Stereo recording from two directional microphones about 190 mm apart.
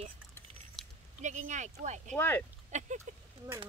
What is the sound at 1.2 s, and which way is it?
Speech, 40° right (ahead or behind).